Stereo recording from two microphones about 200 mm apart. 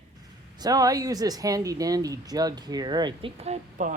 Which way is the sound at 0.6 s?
20° right (ahead or behind).